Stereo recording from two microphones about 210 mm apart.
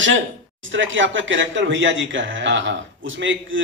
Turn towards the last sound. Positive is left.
turn(degrees=-65)  # may be behind; listen again after turning